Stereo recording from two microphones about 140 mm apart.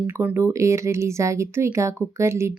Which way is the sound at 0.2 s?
15° right (ahead or behind).